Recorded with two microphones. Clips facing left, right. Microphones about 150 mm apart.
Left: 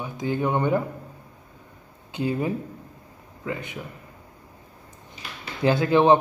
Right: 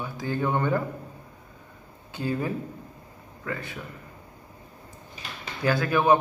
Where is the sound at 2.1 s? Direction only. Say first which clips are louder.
Left 3 dB; 20° left (ahead or behind).